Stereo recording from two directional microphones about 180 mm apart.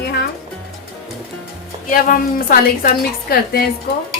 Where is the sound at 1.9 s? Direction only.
50° left (ahead or behind).